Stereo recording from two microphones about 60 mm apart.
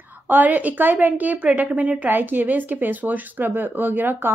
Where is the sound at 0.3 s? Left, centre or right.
Right.